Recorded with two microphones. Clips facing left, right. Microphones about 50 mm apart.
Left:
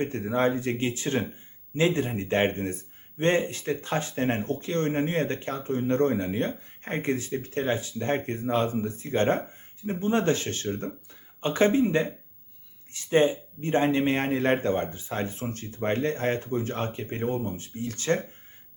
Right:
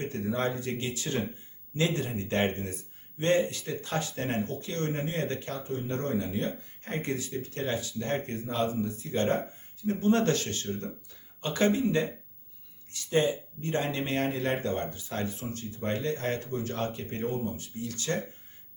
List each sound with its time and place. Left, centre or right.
0.0 s speech: left
9.8 s speech: left